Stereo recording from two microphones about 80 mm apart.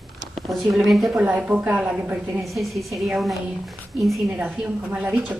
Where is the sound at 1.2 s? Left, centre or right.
Centre.